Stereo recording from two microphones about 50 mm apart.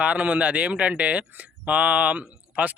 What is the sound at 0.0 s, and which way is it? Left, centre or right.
A man's voice, right.